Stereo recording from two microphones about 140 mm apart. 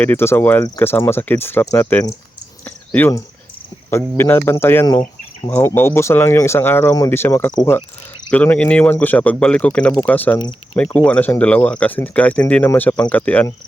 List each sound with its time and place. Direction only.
0.0 s speech: 15° left (ahead or behind)
2.6 s a sound: 10° left (ahead or behind)
3.8 s speech: 15° left (ahead or behind)